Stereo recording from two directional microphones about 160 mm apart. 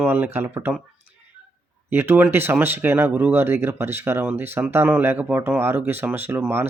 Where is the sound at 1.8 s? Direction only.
15° right (ahead or behind).